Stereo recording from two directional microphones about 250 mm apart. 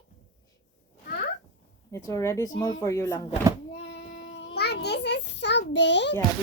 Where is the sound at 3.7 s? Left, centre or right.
Left.